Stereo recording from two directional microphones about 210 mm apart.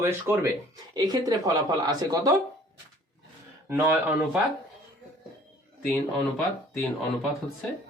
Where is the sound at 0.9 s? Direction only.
20° right (ahead or behind).